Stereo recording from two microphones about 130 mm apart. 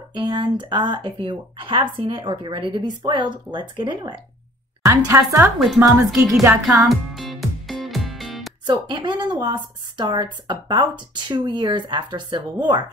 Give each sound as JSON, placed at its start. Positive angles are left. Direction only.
{"t": 0.1, "sound": "a woman's voice", "side_deg": -35}
{"t": 4.8, "sound": "a woman's voice", "side_deg": -25}
{"t": 5.9, "sound": "speech", "side_deg": 0}
{"t": 6.9, "sound": "music", "side_deg": 0}
{"t": 8.6, "sound": "a woman's voice", "side_deg": -35}